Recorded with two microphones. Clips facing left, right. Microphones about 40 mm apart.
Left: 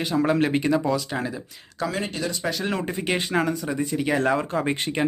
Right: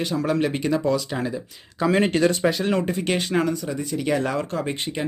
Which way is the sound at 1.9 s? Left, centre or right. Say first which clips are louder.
Right 12 dB; right.